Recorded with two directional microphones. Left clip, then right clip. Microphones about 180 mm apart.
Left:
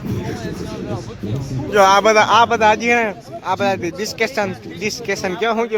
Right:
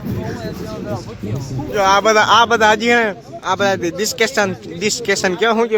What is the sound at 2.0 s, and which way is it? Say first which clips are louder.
Speech: right 1 dB; 5° right (ahead or behind).